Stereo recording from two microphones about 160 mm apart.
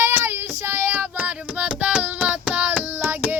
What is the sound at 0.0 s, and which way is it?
Child singing, 15° right (ahead or behind).